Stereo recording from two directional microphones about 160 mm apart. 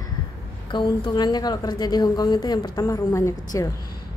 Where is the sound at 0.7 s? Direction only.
30° left (ahead or behind).